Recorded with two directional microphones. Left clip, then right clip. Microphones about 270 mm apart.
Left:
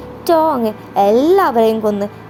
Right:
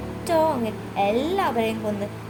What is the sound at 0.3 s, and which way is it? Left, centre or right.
Speech, left.